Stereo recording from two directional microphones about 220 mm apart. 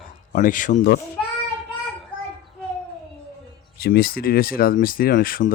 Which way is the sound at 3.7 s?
45° left (ahead or behind).